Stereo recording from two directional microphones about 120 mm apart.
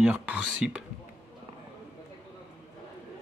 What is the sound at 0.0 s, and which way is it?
Speech, 10° right (ahead or behind).